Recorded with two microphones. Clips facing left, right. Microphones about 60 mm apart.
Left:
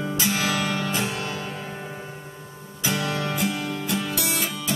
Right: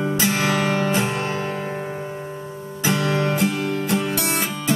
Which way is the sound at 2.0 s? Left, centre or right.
Right.